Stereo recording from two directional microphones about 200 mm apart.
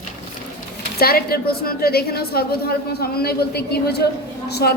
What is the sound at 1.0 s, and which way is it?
A woman's voice, 50° left (ahead or behind).